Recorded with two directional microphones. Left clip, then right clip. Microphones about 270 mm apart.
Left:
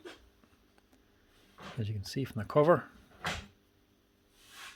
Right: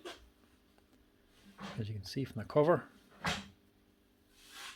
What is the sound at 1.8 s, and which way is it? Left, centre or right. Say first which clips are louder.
Speech: left 4 dB; centre.